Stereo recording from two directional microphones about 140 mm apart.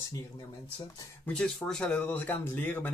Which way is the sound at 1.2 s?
5° left (ahead or behind).